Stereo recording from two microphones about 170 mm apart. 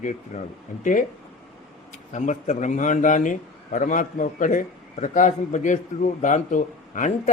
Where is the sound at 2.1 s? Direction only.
45° left (ahead or behind).